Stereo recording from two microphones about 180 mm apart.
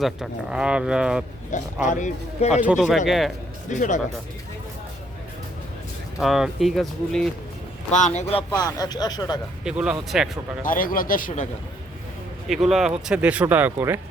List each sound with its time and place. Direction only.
0.0 s speech: 5° right (ahead or behind)
1.5 s speech: 45° left (ahead or behind)
2.5 s speech: 5° right (ahead or behind)
3.7 s speech: 45° left (ahead or behind)
6.1 s speech: centre (ahead or behind)
7.9 s speech: 40° left (ahead or behind)
8.6 s speech: 20° left (ahead or behind)
9.6 s speech: 5° right (ahead or behind)
10.6 s speech: 50° left (ahead or behind)
12.5 s speech: centre (ahead or behind)